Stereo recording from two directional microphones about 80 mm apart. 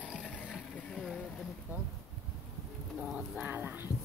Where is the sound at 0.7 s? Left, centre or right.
Centre.